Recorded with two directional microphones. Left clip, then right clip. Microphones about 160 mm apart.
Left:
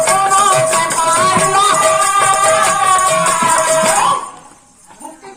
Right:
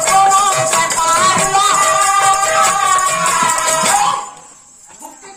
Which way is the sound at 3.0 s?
10° right (ahead or behind).